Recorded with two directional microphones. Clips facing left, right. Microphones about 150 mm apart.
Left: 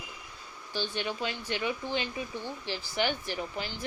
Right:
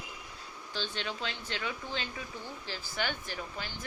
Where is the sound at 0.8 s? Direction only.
15° left (ahead or behind).